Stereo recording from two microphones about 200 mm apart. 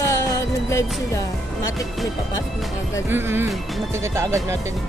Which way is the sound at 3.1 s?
10° right (ahead or behind).